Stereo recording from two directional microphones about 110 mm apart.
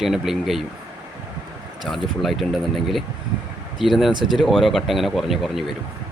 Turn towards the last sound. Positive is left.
turn(degrees=0)  # may be behind; listen again after turning